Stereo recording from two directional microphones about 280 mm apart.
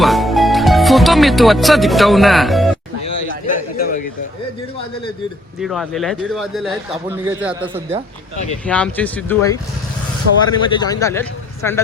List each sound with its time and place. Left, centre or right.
0.0 s music: centre
3.4 s a sound: left
5.5 s a man's voice: centre
8.6 s a man's voice: centre